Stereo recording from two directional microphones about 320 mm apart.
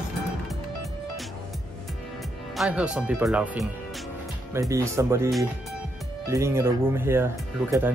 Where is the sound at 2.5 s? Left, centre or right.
Centre.